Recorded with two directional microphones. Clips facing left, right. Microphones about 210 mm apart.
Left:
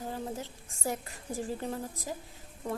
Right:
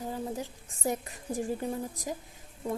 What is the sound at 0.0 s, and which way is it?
A woman's voice, 15° right (ahead or behind).